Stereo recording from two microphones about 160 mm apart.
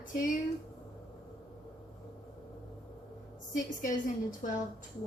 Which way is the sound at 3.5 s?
55° left (ahead or behind).